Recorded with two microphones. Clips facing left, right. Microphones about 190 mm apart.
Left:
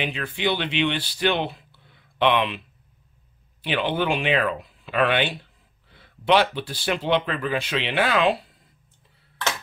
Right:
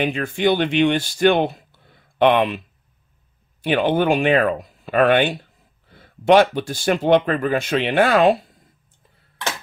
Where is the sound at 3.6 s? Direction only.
45° right (ahead or behind).